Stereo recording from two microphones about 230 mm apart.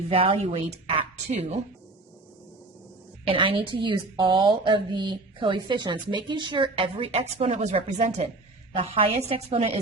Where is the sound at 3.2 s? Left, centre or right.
Right.